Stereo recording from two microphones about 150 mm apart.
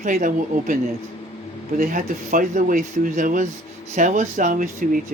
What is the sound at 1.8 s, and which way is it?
Speech, 65° right (ahead or behind).